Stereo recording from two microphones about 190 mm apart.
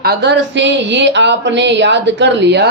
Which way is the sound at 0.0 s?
60° right (ahead or behind).